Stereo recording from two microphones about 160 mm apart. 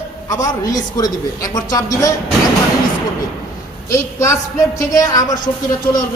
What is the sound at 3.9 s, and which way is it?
A man's voice, 20° left (ahead or behind).